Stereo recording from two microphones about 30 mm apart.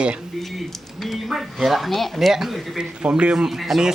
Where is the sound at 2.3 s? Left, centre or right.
Centre.